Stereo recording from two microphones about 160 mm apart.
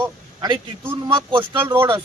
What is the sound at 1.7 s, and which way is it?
Speech, 15° right (ahead or behind).